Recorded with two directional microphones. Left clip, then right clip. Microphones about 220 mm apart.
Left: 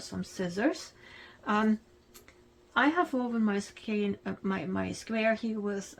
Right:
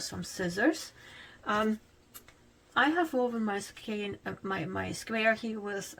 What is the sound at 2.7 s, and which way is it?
Speech, 30° left (ahead or behind).